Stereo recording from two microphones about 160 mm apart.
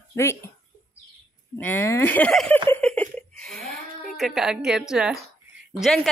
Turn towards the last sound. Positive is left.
turn(degrees=0)  # may be behind; listen again after turning